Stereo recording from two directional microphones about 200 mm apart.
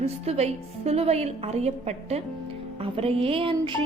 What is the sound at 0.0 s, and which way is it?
A woman's voice, 30° right (ahead or behind).